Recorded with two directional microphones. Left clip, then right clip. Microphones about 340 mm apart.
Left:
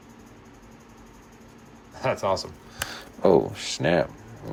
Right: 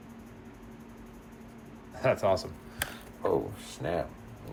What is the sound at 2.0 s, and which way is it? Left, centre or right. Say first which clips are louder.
Speech: left 1 dB; centre.